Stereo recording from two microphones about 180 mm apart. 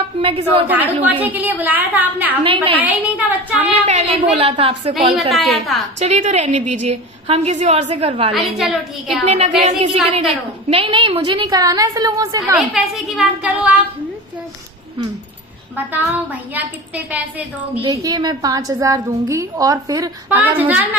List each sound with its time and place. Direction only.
0.2 s a woman's voice: 30° right (ahead or behind)
0.7 s a woman's voice: 10° right (ahead or behind)
2.4 s a woman's voice: 30° right (ahead or behind)
2.8 s a woman's voice: 10° right (ahead or behind)
3.8 s a woman's voice: 35° right (ahead or behind)
5.3 s a woman's voice: centre (ahead or behind)
6.0 s a woman's voice: 40° right (ahead or behind)
8.3 s a woman's voice: centre (ahead or behind)
9.2 s a woman's voice: 40° right (ahead or behind); by 12.4 s 20° right (ahead or behind)
12.5 s a woman's voice: centre (ahead or behind)
15.7 s a woman's voice: 10° right (ahead or behind)
17.8 s a woman's voice: 20° right (ahead or behind)